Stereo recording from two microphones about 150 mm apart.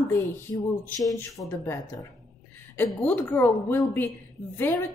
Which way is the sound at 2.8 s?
10° left (ahead or behind).